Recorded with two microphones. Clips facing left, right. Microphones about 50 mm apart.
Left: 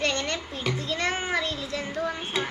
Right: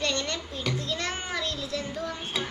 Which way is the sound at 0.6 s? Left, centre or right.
Centre.